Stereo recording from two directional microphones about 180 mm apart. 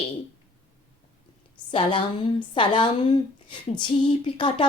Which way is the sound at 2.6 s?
25° left (ahead or behind).